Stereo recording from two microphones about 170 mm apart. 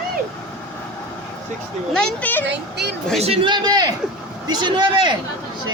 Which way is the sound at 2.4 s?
85° right.